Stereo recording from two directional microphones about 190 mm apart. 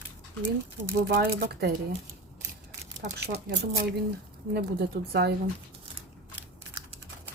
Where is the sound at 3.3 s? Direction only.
55° right (ahead or behind).